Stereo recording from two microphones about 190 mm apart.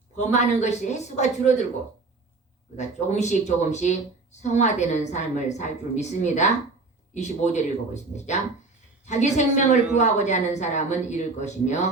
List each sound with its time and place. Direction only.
0.2 s speech: 40° left (ahead or behind)
2.7 s speech: 35° left (ahead or behind)
9.0 s speech: 35° left (ahead or behind)